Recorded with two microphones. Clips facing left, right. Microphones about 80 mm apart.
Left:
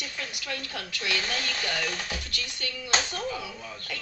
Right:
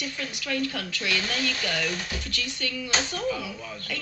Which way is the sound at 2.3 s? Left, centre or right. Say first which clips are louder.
Right 4 dB; left.